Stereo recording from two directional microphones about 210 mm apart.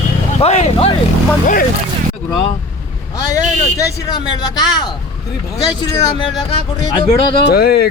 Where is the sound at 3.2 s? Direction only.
15° left (ahead or behind).